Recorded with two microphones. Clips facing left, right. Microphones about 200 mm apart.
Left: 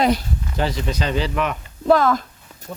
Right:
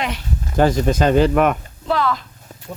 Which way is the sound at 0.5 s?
50° right (ahead or behind).